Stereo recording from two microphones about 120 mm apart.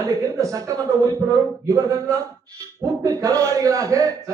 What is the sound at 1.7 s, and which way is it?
A man's voice, 30° right (ahead or behind).